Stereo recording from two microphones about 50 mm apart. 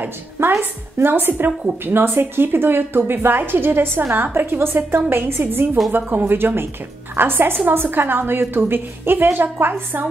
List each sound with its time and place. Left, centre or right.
0.4 s a woman's voice: right